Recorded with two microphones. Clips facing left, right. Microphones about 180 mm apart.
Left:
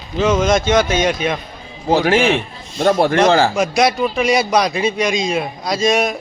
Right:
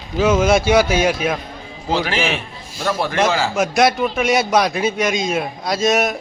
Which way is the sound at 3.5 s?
Centre (ahead or behind).